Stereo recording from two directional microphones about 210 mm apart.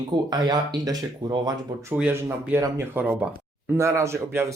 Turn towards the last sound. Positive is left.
turn(degrees=-10)  # may be behind; listen again after turning